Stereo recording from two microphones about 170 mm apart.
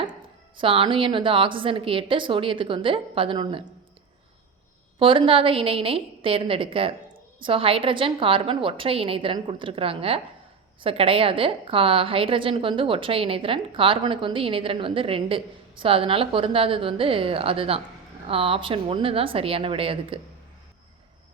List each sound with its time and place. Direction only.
0.5 s a woman's voice: 30° right (ahead or behind)
4.9 s a woman's voice: 30° right (ahead or behind)